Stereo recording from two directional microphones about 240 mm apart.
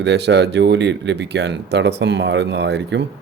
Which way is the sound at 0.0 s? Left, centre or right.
Right.